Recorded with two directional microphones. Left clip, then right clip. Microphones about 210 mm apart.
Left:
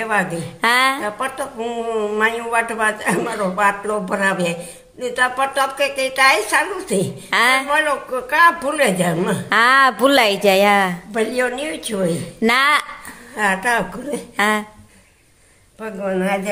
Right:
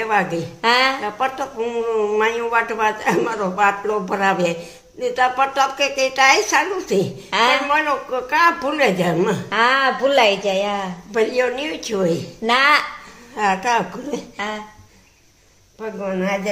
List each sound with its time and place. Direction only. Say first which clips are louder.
0.0 s a woman's voice: right 1 dB; centre (ahead or behind)
0.6 s speech: left 1 dB; 30° left (ahead or behind)
1.0 s a woman's voice: right 1 dB; centre (ahead or behind)
7.2 s speech: left 2 dB; 30° left (ahead or behind)
7.7 s a woman's voice: left 1 dB; centre (ahead or behind)
9.5 s speech: left 5 dB; 30° left (ahead or behind)
11.1 s a woman's voice: right 2 dB; 5° right (ahead or behind)
12.4 s speech: even; 35° left (ahead or behind)
13.4 s a woman's voice: even; centre (ahead or behind)
14.3 s a woman's voice: left 13 dB; 35° left (ahead or behind)
15.8 s a woman's voice: left 2 dB; centre (ahead or behind)